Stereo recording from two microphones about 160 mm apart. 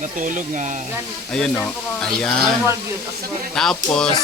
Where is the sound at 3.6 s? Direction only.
5° left (ahead or behind).